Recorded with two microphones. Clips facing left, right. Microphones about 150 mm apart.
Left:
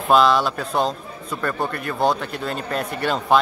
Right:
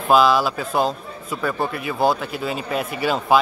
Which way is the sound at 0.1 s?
5° right (ahead or behind).